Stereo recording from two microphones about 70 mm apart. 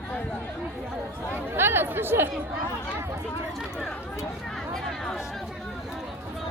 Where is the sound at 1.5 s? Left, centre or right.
Right.